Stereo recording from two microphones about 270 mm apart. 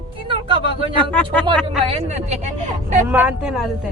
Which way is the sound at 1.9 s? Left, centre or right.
Right.